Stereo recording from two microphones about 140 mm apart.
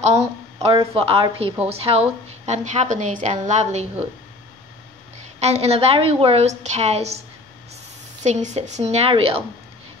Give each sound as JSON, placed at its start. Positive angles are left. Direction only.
{"t": 0.0, "sound": "a woman's voice", "side_deg": -50}
{"t": 5.4, "sound": "a woman's voice", "side_deg": -50}